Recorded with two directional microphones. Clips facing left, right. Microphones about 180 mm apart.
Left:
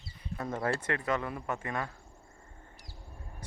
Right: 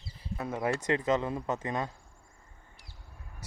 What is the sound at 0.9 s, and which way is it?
Speech, 20° right (ahead or behind).